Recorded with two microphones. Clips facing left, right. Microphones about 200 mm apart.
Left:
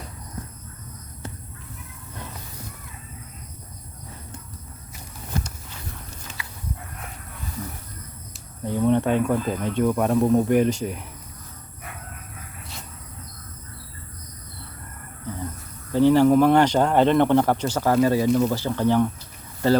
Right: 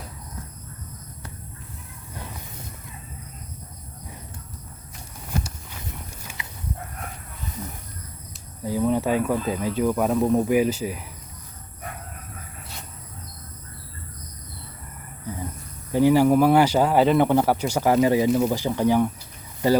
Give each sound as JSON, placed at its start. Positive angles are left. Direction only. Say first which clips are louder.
{"t": 6.2, "sound": "livestock", "louder": "even", "side_deg": -20}
{"t": 8.6, "sound": "speech", "louder": "left 2 dB", "side_deg": -5}
{"t": 15.9, "sound": "speech", "louder": "left 1 dB", "side_deg": -10}